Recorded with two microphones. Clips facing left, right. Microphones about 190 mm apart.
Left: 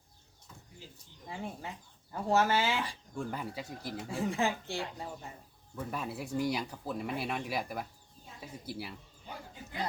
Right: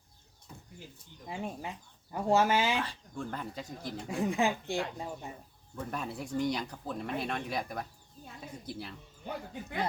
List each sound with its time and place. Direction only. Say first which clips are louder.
1.3 s speech: right 3 dB; 15° right (ahead or behind)
2.8 s speech: left 1 dB; 10° left (ahead or behind)
4.1 s speech: right 2 dB; 15° right (ahead or behind)
5.7 s speech: even; 5° left (ahead or behind)